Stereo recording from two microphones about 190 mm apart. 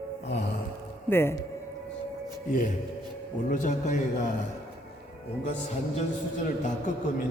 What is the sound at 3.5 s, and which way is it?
Speech, 40° left (ahead or behind).